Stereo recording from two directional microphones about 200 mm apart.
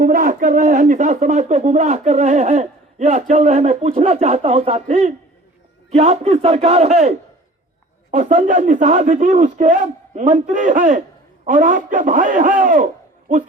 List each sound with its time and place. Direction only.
0.0 s speech: 45° right (ahead or behind)
8.1 s a man's voice: 40° right (ahead or behind)